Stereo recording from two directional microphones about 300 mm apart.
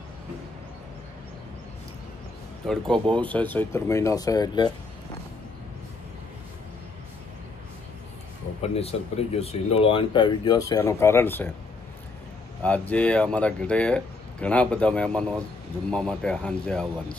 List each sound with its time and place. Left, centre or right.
2.6 s speech: centre
8.7 s speech: centre
12.6 s speech: centre